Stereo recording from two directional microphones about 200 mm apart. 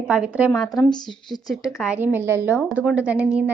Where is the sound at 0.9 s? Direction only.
20° left (ahead or behind).